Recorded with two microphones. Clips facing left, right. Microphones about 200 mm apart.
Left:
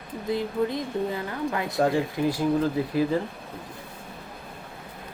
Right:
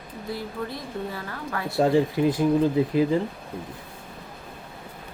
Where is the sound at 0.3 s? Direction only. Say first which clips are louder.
Left 6 dB; 20° left (ahead or behind).